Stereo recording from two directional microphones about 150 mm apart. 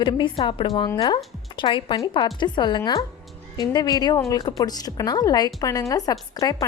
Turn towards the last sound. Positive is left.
turn(degrees=25)  # may be behind; listen again after turning